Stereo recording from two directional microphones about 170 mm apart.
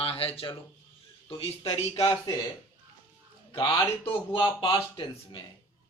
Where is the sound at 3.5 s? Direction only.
30° left (ahead or behind).